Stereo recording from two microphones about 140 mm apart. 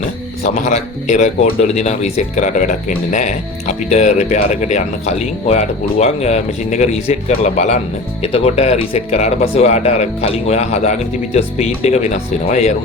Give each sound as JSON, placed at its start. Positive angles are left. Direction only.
{"t": 0.4, "sound": "speech", "side_deg": 55}
{"t": 8.2, "sound": "speech", "side_deg": 45}